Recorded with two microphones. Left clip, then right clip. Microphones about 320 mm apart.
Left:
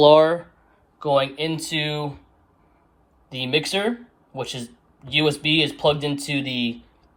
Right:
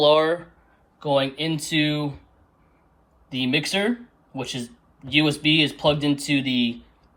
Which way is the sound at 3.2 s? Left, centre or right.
Centre.